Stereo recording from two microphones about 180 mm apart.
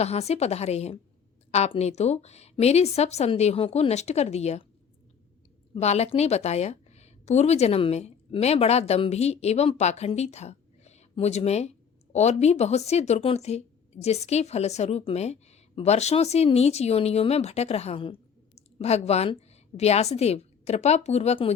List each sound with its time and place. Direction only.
0.0 s a woman's voice: 35° left (ahead or behind)
5.7 s a woman's voice: 35° left (ahead or behind)